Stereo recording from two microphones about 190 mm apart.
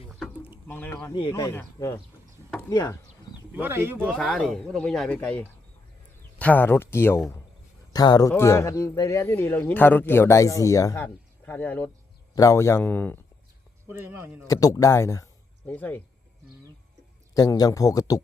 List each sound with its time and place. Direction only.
0.7 s speech: 10° left (ahead or behind)
1.1 s speech: 20° left (ahead or behind)
2.5 s a sound: 15° left (ahead or behind)
3.5 s speech: 10° right (ahead or behind)
4.0 s speech: centre (ahead or behind)
13.9 s speech: 10° right (ahead or behind)
14.4 s speech: 20° left (ahead or behind)
17.3 s speech: 20° left (ahead or behind)